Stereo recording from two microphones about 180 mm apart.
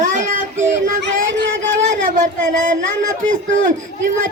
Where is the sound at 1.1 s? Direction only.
90° right.